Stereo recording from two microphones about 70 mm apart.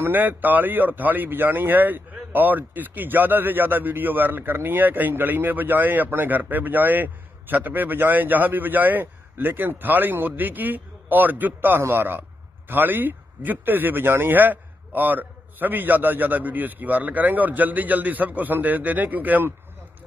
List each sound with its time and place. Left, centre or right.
0.0 s speech: right